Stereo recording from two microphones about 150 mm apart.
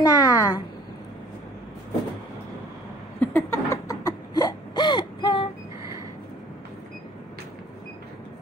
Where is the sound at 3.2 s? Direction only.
15° left (ahead or behind); by 5.4 s 30° left (ahead or behind).